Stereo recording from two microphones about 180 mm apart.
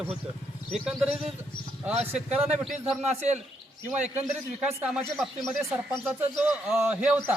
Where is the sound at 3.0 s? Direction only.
40° right (ahead or behind).